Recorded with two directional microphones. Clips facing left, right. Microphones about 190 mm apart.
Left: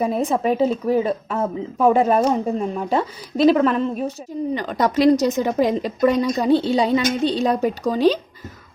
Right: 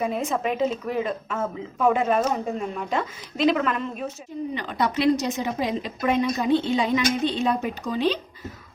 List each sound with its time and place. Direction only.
0.0 s speech: 35° left (ahead or behind)